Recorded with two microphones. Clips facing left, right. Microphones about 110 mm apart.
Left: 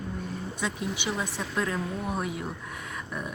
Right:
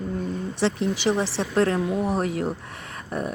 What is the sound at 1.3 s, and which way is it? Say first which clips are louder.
Speech: right 8 dB; 65° right (ahead or behind).